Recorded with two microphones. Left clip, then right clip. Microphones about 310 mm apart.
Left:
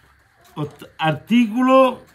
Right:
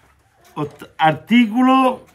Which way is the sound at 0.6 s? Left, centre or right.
Centre.